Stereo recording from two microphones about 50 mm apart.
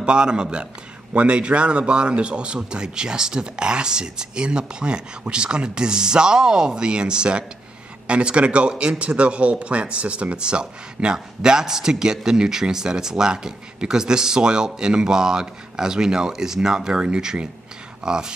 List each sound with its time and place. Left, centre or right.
0.0 s a man's voice: centre